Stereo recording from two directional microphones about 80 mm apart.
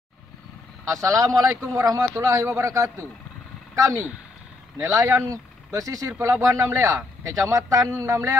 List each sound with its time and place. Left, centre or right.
0.9 s speech: right